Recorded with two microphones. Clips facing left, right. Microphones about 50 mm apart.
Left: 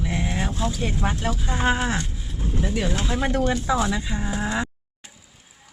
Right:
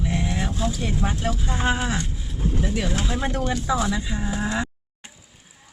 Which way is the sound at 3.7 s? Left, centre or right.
Centre.